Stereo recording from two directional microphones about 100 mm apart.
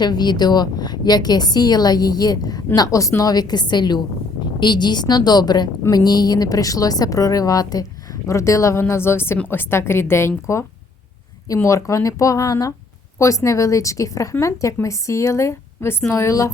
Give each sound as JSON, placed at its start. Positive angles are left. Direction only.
{"t": 0.0, "sound": "a woman's voice", "side_deg": 45}